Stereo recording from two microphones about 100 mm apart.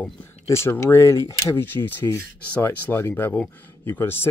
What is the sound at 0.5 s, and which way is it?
Speech, 25° left (ahead or behind).